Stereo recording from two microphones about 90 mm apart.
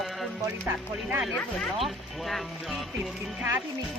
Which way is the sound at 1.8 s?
Centre (ahead or behind).